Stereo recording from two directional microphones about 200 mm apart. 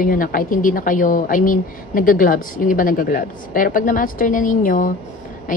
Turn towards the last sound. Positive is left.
turn(degrees=40)  # may be behind; listen again after turning